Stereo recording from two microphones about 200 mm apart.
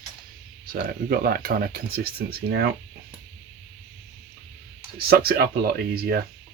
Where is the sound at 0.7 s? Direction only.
50° right (ahead or behind).